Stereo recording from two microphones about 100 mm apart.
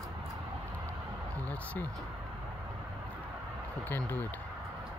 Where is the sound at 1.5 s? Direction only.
15° left (ahead or behind).